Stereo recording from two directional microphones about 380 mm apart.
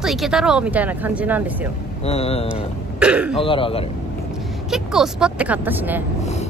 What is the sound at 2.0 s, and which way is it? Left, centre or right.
Speech, centre.